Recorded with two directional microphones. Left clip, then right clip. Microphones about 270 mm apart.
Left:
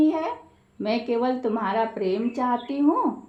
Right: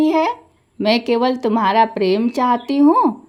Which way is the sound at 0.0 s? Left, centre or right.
Right.